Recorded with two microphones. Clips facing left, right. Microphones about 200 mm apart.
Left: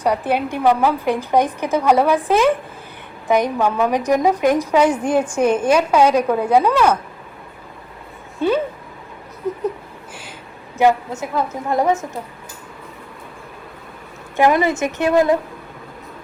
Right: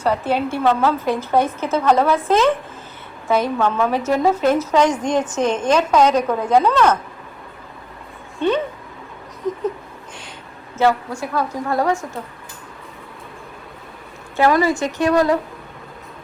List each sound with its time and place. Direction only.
0.0 s a woman's voice: 15° left (ahead or behind)
8.4 s a woman's voice: 5° left (ahead or behind)
9.5 s a sound: 10° left (ahead or behind)
10.8 s a woman's voice: 20° left (ahead or behind)
14.3 s a woman's voice: 20° left (ahead or behind)